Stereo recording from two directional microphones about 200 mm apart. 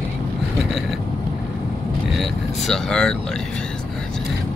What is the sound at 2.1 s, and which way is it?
Speech, centre (ahead or behind).